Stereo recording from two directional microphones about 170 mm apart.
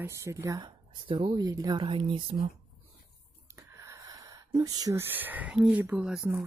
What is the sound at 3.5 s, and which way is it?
Speech, 15° right (ahead or behind).